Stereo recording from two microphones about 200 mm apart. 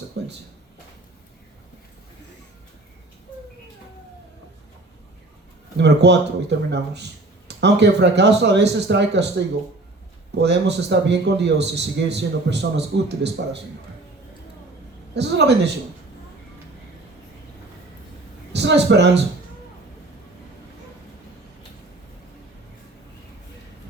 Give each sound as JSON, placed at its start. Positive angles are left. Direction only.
{"t": 0.2, "sound": "a sound", "side_deg": -60}
{"t": 5.7, "sound": "speech", "side_deg": -60}
{"t": 10.3, "sound": "speech", "side_deg": -60}
{"t": 15.1, "sound": "speech", "side_deg": -60}
{"t": 18.5, "sound": "speech", "side_deg": -60}